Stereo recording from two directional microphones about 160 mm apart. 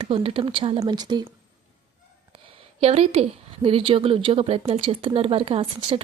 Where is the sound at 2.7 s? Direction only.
40° right (ahead or behind).